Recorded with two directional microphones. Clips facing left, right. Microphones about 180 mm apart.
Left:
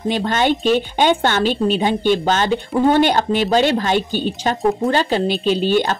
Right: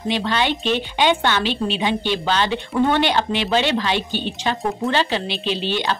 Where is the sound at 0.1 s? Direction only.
45° left (ahead or behind).